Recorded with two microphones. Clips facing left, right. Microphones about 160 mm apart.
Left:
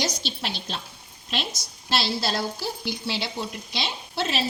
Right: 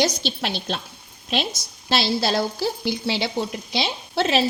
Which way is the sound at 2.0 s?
70° right (ahead or behind).